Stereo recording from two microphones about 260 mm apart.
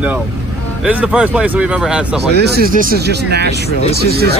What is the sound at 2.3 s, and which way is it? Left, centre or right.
Speech, right.